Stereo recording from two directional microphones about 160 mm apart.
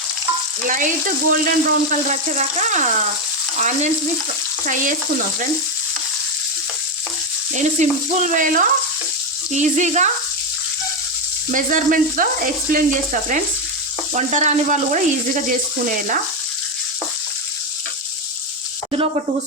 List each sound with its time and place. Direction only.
0.7 s speech: 55° right (ahead or behind)
7.5 s speech: 50° right (ahead or behind)
11.5 s speech: 55° right (ahead or behind)
14.1 s speech: 50° right (ahead or behind)